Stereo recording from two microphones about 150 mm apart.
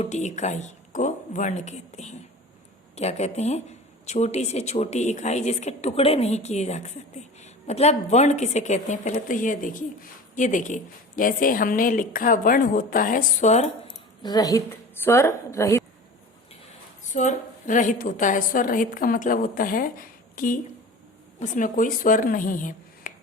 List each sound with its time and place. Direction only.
0.0 s a woman's voice: 50° left (ahead or behind)
14.2 s a woman's voice: 25° left (ahead or behind)
17.1 s a woman's voice: 55° left (ahead or behind)